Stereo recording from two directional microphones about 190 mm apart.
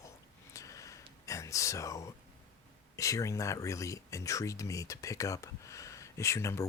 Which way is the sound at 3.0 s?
15° left (ahead or behind).